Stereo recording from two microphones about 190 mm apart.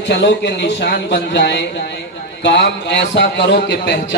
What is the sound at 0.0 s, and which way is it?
A man's voice, 65° left (ahead or behind).